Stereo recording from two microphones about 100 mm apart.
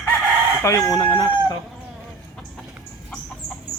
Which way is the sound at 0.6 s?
30° left (ahead or behind).